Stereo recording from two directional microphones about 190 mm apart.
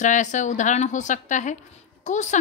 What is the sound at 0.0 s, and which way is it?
A woman's voice, 40° left (ahead or behind).